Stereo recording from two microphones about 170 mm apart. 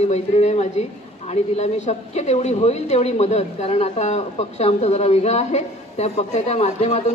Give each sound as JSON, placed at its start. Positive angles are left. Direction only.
{"t": 0.0, "sound": "a woman's voice", "side_deg": 40}